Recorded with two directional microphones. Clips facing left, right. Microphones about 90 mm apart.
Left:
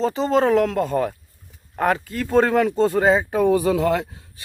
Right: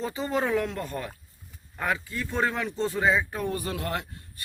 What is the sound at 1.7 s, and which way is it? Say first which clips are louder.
Speech: left 8 dB; 65° left (ahead or behind).